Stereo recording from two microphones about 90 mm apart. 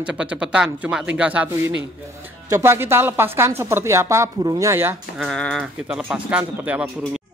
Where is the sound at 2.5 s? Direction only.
30° right (ahead or behind).